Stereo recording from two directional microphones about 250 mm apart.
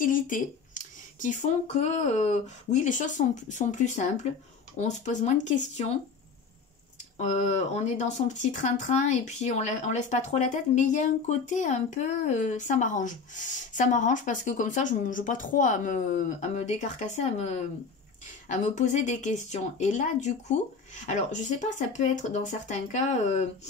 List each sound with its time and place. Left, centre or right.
0.0 s speech: left
7.2 s speech: left